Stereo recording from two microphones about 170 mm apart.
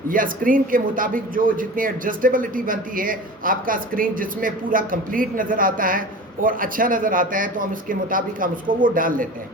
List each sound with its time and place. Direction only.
0.1 s speech: 55° right (ahead or behind)